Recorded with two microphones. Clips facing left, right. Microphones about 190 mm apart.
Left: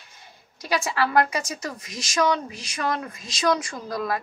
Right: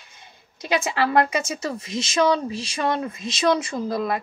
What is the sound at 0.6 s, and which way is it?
A woman's voice, 20° right (ahead or behind).